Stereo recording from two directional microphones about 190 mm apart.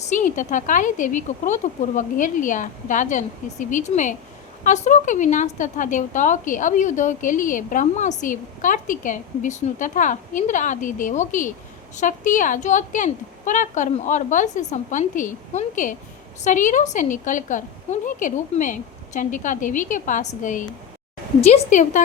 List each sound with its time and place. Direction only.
0.1 s a woman's voice: 40° left (ahead or behind)